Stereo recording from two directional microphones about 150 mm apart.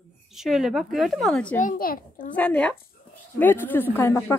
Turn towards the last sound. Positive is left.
turn(degrees=15)  # may be behind; listen again after turning